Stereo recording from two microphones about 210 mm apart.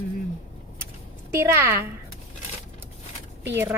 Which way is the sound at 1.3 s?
15° right (ahead or behind).